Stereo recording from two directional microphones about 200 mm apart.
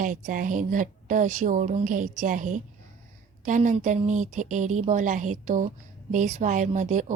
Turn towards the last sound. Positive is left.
turn(degrees=-40)  # may be behind; listen again after turning